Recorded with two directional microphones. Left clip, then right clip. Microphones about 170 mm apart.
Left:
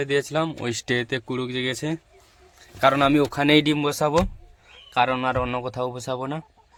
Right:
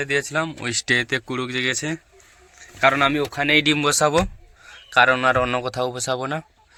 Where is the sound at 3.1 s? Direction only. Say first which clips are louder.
Left 1 dB; 45° left (ahead or behind).